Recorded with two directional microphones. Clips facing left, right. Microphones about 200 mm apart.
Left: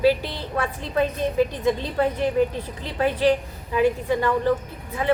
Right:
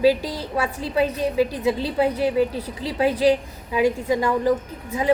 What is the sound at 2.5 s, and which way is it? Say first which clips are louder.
Speech: right 3 dB; 35° right (ahead or behind).